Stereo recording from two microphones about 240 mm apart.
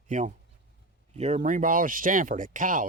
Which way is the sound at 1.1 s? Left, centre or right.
Right.